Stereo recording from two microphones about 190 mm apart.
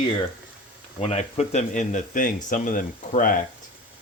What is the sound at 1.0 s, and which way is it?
Speech, 30° left (ahead or behind).